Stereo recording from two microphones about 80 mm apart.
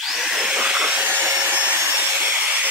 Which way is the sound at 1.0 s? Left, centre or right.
Right.